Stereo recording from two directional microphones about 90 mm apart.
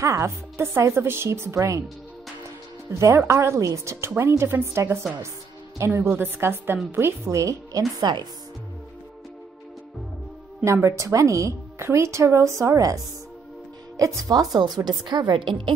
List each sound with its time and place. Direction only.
0.0 s speech: 35° right (ahead or behind)
2.9 s speech: 30° right (ahead or behind)
5.9 s speech: 25° right (ahead or behind)
7.2 s speech: 35° right (ahead or behind)
8.0 s speech: 50° right (ahead or behind)
10.6 s speech: 30° right (ahead or behind)
14.9 s a woman's voice: 55° right (ahead or behind)